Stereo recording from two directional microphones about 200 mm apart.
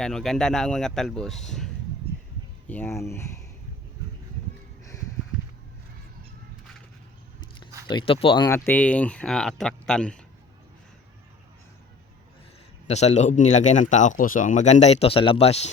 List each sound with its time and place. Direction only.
0.0 s speech: centre (ahead or behind)
7.9 s speech: 25° left (ahead or behind)
8.4 s speech: 10° left (ahead or behind)
12.9 s speech: 35° left (ahead or behind)